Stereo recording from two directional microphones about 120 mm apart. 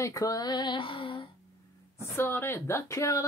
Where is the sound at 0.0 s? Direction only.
30° left (ahead or behind); by 1.2 s 45° left (ahead or behind).